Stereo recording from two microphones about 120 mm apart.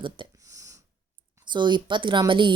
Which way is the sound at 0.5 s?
25° right (ahead or behind).